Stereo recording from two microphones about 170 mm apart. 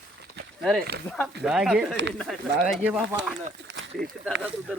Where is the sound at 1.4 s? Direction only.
5° right (ahead or behind).